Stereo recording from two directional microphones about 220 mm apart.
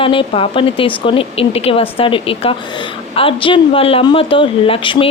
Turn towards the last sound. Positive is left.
turn(degrees=25)  # may be behind; listen again after turning